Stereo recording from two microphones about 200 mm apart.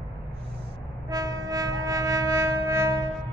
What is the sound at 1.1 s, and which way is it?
Music, 15° right (ahead or behind).